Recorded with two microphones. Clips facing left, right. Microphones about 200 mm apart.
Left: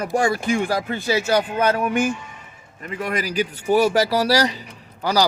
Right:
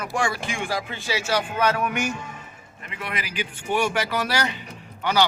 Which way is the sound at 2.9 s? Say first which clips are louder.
Left 8 dB; 45° left (ahead or behind).